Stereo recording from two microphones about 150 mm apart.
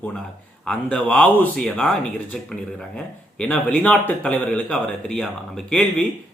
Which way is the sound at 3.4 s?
10° left (ahead or behind).